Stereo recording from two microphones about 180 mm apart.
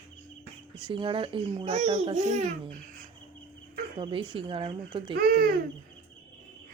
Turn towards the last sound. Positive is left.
turn(degrees=-55)  # may be behind; listen again after turning